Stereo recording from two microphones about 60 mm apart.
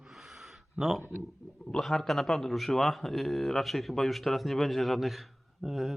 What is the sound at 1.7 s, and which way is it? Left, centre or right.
A man's voice, centre.